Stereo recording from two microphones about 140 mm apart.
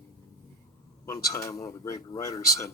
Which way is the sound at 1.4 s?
25° left (ahead or behind).